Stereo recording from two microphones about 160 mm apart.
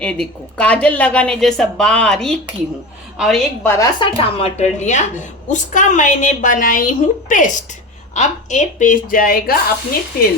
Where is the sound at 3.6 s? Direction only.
15° left (ahead or behind).